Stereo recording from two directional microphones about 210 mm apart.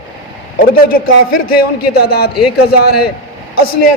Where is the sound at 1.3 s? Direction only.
45° left (ahead or behind).